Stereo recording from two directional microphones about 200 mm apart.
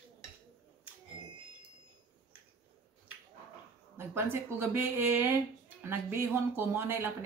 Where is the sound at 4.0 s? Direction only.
10° right (ahead or behind).